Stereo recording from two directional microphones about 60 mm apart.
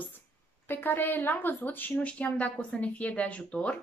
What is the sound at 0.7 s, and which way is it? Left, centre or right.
A woman's voice, left.